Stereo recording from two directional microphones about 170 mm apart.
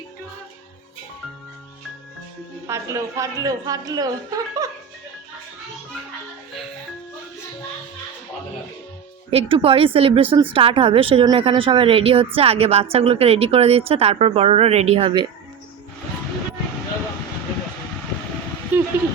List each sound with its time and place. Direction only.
2.6 s speech: 15° right (ahead or behind)
9.3 s speech: 35° right (ahead or behind)
18.7 s a sound: 10° right (ahead or behind)